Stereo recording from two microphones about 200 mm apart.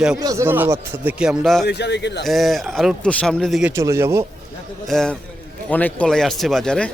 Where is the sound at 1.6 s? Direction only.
60° left (ahead or behind).